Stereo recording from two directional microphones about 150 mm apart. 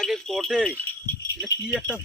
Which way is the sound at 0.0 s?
Centre (ahead or behind).